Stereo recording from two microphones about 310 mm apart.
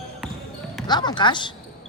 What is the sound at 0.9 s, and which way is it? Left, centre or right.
Speech, centre.